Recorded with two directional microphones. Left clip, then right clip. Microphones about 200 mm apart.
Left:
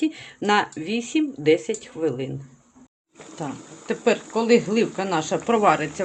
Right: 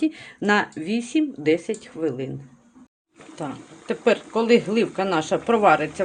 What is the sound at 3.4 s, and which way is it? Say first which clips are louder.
A woman's voice: even; 5° right (ahead or behind).